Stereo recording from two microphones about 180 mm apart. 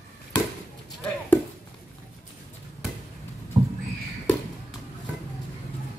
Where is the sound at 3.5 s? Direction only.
40° right (ahead or behind).